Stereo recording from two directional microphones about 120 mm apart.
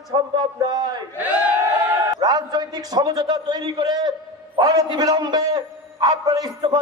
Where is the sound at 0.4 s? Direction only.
35° right (ahead or behind).